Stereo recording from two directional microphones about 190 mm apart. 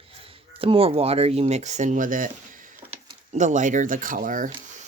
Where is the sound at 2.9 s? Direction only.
35° right (ahead or behind).